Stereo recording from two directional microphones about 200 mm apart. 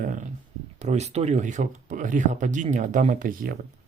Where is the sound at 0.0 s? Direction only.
40° right (ahead or behind).